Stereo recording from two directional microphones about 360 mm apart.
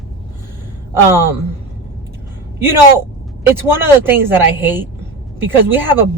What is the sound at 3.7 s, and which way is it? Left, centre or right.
Speech, centre.